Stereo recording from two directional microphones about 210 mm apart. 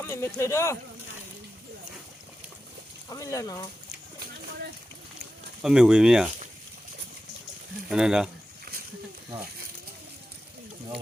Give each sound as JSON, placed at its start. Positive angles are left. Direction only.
{"t": 0.0, "sound": "speech", "side_deg": 10}
{"t": 3.1, "sound": "speech", "side_deg": 15}
{"t": 5.6, "sound": "speech", "side_deg": -5}
{"t": 7.9, "sound": "speech", "side_deg": -5}